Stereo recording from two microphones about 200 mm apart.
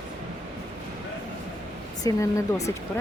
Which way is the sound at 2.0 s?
15° left (ahead or behind).